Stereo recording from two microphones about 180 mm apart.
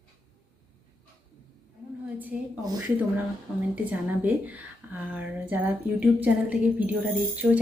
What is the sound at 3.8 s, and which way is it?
A woman's voice, 10° right (ahead or behind).